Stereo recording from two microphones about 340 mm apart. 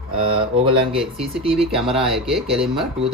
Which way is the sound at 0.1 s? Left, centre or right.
Centre.